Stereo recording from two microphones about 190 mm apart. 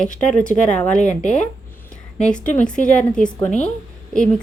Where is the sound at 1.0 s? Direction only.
40° left (ahead or behind).